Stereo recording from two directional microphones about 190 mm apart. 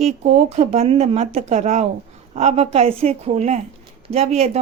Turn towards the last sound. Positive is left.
turn(degrees=-35)  # may be behind; listen again after turning